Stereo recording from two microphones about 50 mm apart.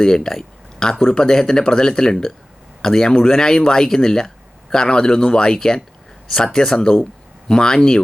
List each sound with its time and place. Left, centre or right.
0.0 s speech: centre